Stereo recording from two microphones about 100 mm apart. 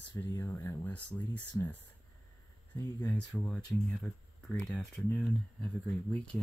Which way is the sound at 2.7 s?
40° left (ahead or behind).